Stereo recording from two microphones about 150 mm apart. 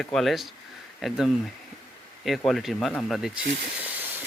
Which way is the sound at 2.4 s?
Centre (ahead or behind).